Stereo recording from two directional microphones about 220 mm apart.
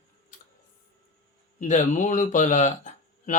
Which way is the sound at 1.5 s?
35° left (ahead or behind).